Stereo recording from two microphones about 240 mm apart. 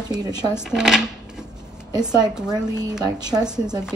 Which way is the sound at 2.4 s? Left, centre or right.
Centre.